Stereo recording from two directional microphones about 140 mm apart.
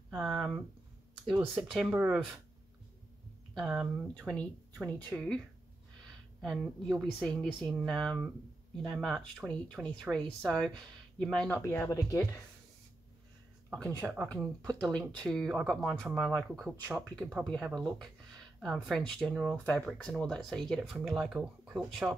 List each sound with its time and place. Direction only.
0.1 s a sound: centre (ahead or behind)
1.3 s speech: 5° right (ahead or behind)
3.5 s speech: 5° right (ahead or behind)
4.1 s speech: 5° left (ahead or behind)
6.4 s speech: centre (ahead or behind)
11.7 s speech: 20° left (ahead or behind)
13.7 s speech: 10° left (ahead or behind)